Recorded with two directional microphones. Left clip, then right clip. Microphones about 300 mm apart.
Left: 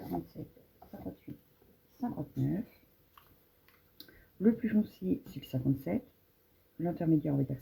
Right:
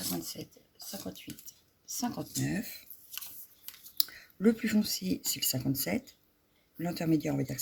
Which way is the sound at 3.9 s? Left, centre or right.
Right.